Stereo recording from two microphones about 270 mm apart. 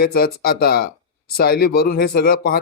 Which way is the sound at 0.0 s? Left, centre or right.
Left.